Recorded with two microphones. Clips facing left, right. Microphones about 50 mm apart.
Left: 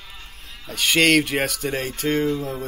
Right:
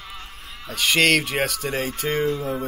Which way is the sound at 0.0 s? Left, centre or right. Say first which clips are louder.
Right 4 dB; right.